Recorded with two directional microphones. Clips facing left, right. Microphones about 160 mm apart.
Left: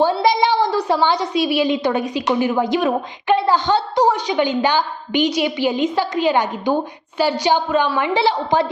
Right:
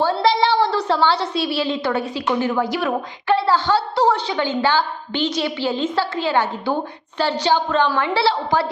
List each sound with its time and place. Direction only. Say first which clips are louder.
0.0 s a woman's voice: left 2 dB; 15° left (ahead or behind)